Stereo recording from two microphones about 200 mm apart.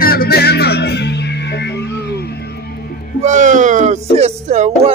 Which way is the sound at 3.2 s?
40° right (ahead or behind).